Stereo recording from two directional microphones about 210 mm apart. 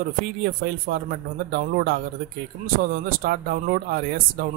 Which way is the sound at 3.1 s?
45° right (ahead or behind).